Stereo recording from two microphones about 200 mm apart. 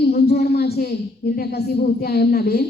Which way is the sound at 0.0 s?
50° left (ahead or behind).